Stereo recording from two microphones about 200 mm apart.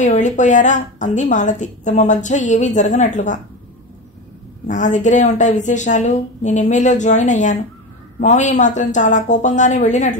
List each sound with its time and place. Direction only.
0.0 s a woman's voice: 35° left (ahead or behind)
4.6 s a woman's voice: 40° left (ahead or behind)